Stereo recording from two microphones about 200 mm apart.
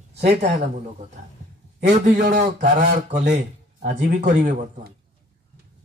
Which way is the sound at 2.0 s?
35° right (ahead or behind).